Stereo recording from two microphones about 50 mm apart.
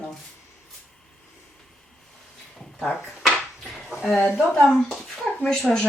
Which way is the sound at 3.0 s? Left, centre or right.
Centre.